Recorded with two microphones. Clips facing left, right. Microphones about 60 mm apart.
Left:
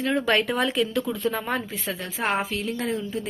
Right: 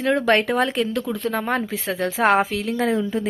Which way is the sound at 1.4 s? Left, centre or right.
Right.